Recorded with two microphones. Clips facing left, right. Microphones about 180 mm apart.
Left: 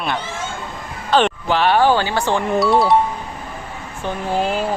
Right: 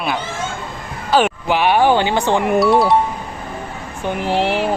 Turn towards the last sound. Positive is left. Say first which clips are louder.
# right 2 dB
turn(degrees=-75)  # may be behind; listen again after turning